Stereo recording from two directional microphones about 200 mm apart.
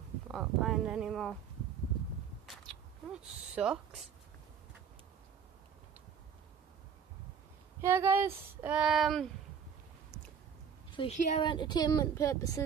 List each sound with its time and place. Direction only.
0.3 s speech: centre (ahead or behind)
2.4 s a sound: centre (ahead or behind)
3.2 s speech: 5° right (ahead or behind)
7.8 s child singing: 15° right (ahead or behind)
10.9 s a sound: 25° left (ahead or behind)
11.1 s a woman's voice: 35° left (ahead or behind)
11.4 s speech: 20° left (ahead or behind)